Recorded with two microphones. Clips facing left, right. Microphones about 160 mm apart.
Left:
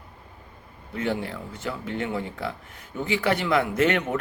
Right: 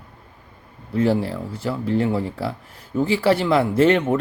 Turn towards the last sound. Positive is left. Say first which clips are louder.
# right 6 dB
turn(degrees=-30)  # may be behind; listen again after turning